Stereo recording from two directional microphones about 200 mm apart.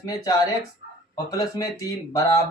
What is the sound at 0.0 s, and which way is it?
Speech, 20° left (ahead or behind).